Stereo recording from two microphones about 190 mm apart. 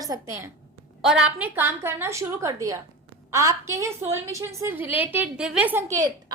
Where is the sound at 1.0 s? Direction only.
5° right (ahead or behind).